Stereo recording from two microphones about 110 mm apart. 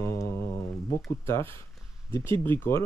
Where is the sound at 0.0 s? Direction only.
25° left (ahead or behind).